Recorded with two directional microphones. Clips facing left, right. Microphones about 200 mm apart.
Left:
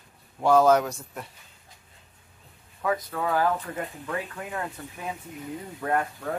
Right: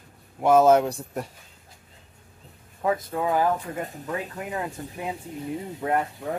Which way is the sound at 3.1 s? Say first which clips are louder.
Right 1 dB; 20° right (ahead or behind).